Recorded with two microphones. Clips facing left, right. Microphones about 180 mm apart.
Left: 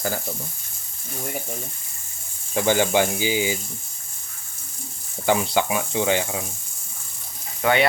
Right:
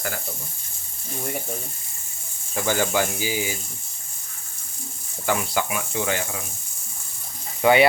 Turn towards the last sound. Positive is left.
turn(degrees=-10)  # may be behind; listen again after turning